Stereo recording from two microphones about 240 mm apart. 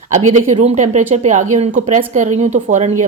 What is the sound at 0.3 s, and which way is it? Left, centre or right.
A woman's voice, right.